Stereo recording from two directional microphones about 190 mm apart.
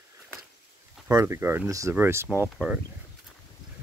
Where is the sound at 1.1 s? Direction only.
15° right (ahead or behind).